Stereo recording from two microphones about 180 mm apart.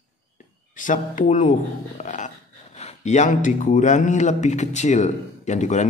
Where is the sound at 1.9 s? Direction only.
40° left (ahead or behind).